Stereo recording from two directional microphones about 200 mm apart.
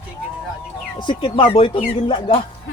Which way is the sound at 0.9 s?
25° left (ahead or behind).